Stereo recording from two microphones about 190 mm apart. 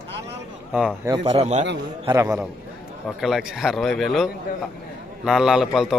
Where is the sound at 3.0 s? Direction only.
Centre (ahead or behind).